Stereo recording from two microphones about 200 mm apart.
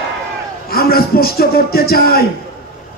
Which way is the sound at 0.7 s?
50° left (ahead or behind).